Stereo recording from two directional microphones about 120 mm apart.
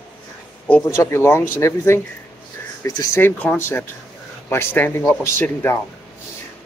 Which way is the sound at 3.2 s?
15° left (ahead or behind).